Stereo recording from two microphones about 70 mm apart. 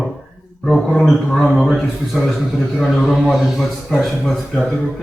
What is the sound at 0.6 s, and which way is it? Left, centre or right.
Speech, centre.